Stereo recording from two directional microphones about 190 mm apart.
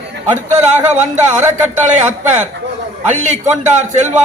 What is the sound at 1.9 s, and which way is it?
A man's voice, 40° right (ahead or behind).